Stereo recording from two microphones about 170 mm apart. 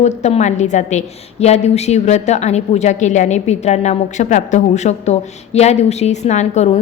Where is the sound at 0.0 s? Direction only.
40° left (ahead or behind).